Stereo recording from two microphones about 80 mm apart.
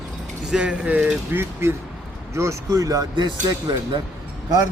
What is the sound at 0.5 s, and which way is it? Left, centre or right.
Speech, centre.